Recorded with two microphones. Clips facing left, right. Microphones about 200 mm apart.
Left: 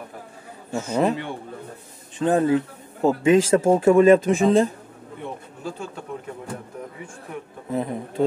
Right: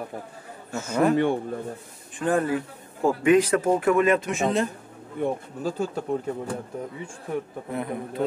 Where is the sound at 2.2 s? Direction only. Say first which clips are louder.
Left 4 dB; 20° left (ahead or behind).